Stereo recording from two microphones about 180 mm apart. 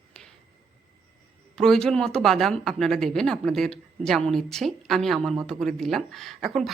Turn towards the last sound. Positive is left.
turn(degrees=0)  # may be behind; listen again after turning